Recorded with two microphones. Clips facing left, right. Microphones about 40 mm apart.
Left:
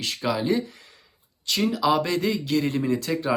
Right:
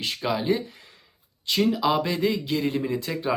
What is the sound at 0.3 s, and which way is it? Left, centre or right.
Speech, centre.